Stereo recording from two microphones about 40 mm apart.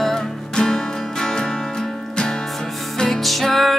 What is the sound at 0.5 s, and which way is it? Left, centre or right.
Music, centre.